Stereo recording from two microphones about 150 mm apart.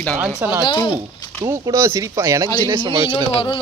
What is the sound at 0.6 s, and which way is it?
Speech, 30° left (ahead or behind).